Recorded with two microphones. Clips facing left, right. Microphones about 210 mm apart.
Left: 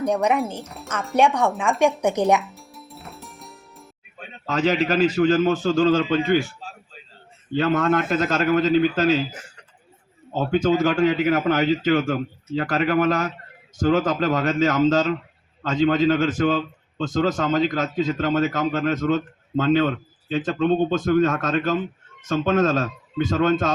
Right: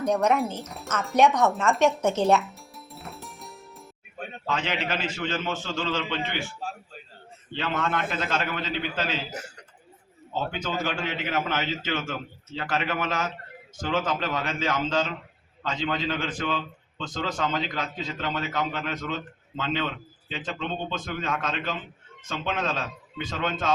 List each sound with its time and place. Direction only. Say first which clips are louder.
0.6 s speech: left 1 dB; centre (ahead or behind)
1.2 s speech: left 1 dB; 10° left (ahead or behind)
2.4 s music: left 1 dB; centre (ahead or behind)
4.4 s a man's voice: left 9 dB; 40° left (ahead or behind)
7.5 s a man's voice: left 9 dB; 45° left (ahead or behind)
10.3 s a man's voice: left 10 dB; 45° left (ahead or behind)